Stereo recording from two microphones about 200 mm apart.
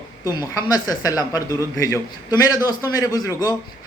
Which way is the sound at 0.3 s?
20° left (ahead or behind).